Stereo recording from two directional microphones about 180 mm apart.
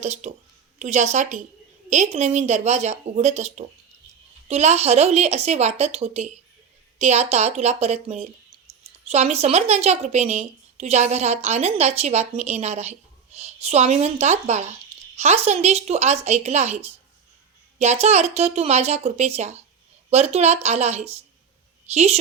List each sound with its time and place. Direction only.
0.0 s a woman's voice: 40° right (ahead or behind)